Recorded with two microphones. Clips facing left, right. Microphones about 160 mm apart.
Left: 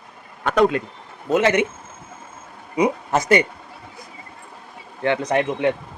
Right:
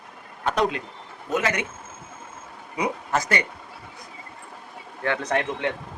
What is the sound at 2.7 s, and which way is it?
Speech, 20° left (ahead or behind).